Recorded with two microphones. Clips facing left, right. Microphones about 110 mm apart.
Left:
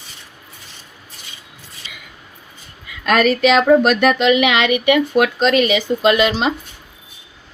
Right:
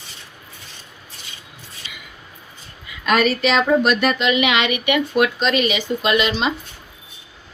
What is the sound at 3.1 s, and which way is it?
Speech, 75° left (ahead or behind).